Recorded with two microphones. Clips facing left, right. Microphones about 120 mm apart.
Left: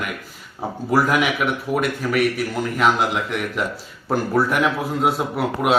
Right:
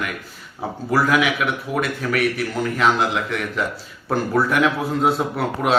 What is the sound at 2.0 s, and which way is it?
Speech, 10° left (ahead or behind).